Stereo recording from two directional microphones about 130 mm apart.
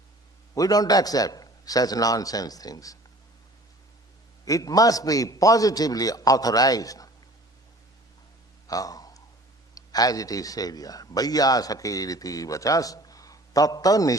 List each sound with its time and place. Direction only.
0.5 s a man's voice: 30° left (ahead or behind)
4.4 s a man's voice: 25° left (ahead or behind)
8.6 s a sound: 30° left (ahead or behind)
9.7 s a man's voice: 30° left (ahead or behind)